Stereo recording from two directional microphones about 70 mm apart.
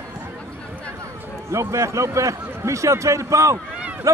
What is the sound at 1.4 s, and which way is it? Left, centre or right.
Speech, right.